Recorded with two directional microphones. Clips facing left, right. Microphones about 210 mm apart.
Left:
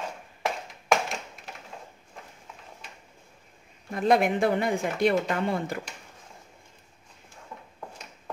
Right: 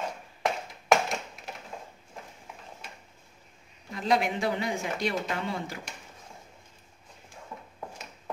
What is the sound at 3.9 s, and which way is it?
Speech, 55° left (ahead or behind).